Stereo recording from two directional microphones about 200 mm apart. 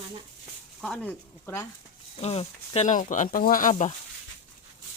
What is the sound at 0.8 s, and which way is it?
Speech, 5° left (ahead or behind).